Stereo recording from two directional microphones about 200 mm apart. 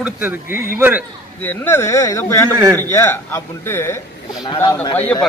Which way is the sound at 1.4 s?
10° left (ahead or behind).